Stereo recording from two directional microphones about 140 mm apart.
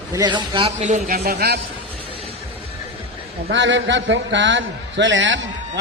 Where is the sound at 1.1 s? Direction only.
90° right.